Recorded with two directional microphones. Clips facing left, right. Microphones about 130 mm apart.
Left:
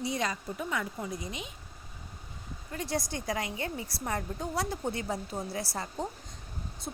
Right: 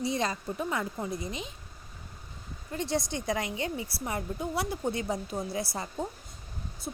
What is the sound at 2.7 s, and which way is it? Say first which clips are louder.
A woman's voice: right 3 dB; 25° right (ahead or behind).